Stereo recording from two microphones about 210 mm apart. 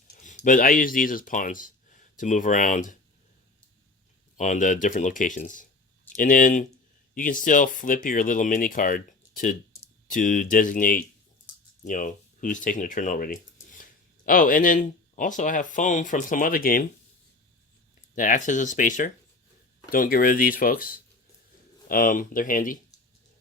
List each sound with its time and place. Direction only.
0.2 s speech: 35° left (ahead or behind)
4.4 s speech: 35° left (ahead or behind)
18.1 s speech: 40° left (ahead or behind)